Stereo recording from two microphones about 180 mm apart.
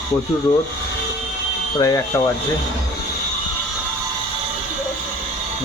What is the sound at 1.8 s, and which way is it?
Speech, 20° left (ahead or behind).